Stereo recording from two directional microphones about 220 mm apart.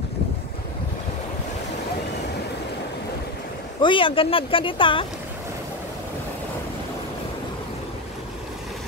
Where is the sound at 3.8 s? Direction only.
20° left (ahead or behind).